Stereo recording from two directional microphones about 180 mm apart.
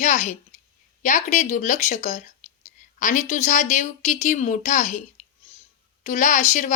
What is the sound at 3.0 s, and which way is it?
Speech, 45° left (ahead or behind).